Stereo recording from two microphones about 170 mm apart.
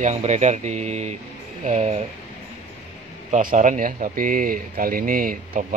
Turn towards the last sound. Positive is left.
turn(degrees=-55)  # may be behind; listen again after turning